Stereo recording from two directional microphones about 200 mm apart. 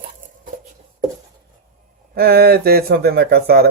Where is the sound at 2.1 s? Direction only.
50° right (ahead or behind).